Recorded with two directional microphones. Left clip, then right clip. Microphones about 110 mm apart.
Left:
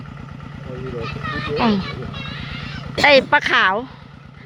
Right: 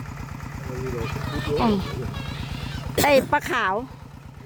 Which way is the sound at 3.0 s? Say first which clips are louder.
Left 7 dB; 20° right (ahead or behind).